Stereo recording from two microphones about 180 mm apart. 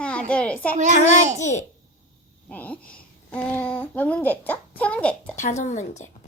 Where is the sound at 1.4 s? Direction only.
40° left (ahead or behind).